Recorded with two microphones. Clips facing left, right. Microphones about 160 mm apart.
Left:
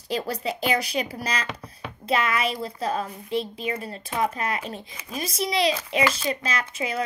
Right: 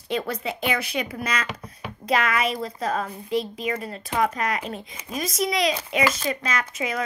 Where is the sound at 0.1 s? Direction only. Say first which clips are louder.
Even; 35° left (ahead or behind).